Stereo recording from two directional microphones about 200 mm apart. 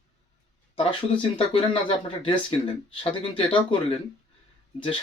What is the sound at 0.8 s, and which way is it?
Speech, 25° left (ahead or behind).